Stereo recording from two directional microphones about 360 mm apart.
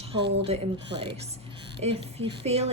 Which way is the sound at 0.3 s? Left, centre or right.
Centre.